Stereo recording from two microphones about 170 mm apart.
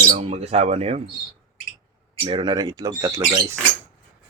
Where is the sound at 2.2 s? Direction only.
30° right (ahead or behind).